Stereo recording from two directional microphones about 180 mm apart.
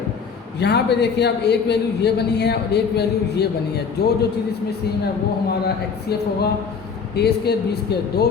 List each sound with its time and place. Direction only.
0.6 s a man's voice: 70° left (ahead or behind)
5.5 s a man's voice: 60° left (ahead or behind)